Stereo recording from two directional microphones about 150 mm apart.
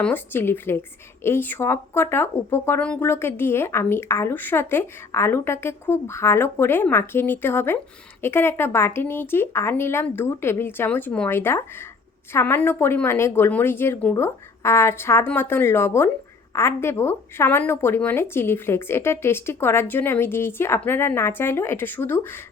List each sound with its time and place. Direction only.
0.0 s a woman's voice: 15° left (ahead or behind)